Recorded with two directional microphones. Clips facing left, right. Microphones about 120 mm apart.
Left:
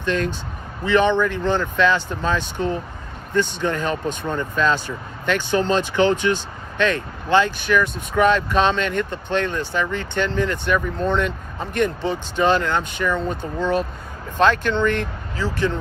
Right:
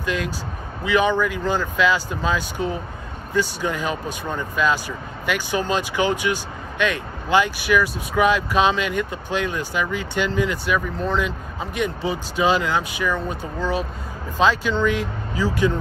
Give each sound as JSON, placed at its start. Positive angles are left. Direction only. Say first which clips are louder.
{"t": 0.0, "sound": "speech", "louder": "left 3 dB", "side_deg": -5}